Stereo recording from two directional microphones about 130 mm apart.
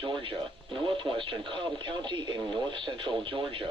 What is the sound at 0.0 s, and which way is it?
Speech, 40° right (ahead or behind).